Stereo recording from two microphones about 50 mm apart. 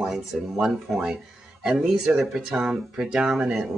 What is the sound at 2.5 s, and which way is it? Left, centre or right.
Speech, centre.